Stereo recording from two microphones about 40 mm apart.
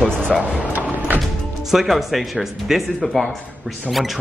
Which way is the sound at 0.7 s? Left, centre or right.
Right.